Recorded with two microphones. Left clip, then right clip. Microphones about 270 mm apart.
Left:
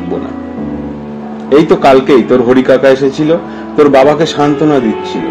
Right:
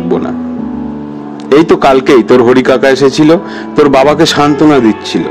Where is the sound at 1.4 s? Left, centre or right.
Right.